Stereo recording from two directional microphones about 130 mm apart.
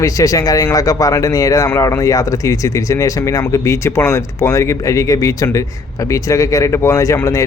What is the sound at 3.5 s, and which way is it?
Speech, 25° left (ahead or behind).